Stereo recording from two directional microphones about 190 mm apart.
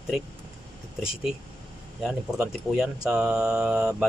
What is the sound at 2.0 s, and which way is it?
Speech, 5° right (ahead or behind).